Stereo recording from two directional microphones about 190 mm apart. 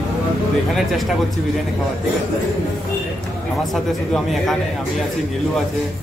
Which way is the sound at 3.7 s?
Centre (ahead or behind).